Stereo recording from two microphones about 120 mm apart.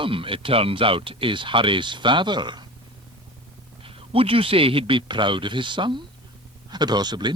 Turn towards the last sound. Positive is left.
turn(degrees=-35)  # may be behind; listen again after turning